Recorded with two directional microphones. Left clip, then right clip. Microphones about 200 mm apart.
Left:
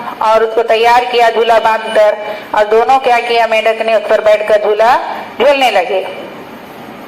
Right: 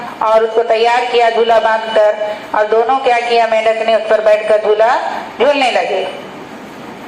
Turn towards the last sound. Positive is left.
turn(degrees=55)  # may be behind; listen again after turning